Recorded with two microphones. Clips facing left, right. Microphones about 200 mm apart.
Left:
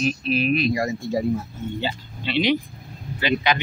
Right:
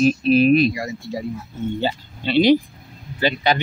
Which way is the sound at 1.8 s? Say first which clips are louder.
Right 4 dB; 40° right (ahead or behind).